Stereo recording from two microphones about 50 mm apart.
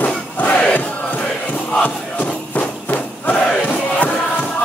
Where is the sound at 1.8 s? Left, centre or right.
Left.